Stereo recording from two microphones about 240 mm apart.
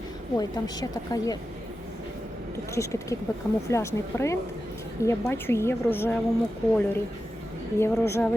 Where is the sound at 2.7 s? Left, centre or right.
Centre.